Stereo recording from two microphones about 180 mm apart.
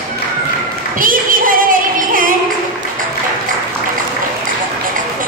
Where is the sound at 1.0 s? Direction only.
50° right (ahead or behind).